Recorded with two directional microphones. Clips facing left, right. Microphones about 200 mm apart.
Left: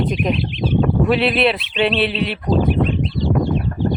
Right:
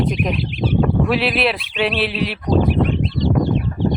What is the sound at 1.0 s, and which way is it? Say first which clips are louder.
Speech: left 2 dB; centre (ahead or behind).